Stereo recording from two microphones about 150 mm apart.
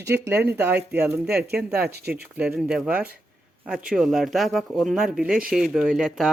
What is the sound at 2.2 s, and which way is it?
Speech, 10° right (ahead or behind).